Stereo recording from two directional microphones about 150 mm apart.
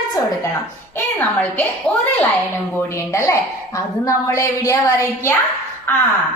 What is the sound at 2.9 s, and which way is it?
A woman's voice, 20° left (ahead or behind).